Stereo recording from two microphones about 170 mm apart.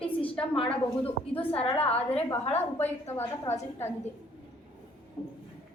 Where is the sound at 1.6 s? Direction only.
35° left (ahead or behind).